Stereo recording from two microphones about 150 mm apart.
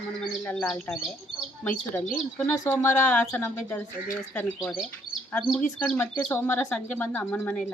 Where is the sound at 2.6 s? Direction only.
15° left (ahead or behind).